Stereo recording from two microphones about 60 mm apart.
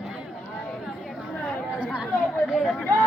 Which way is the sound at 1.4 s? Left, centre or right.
Centre.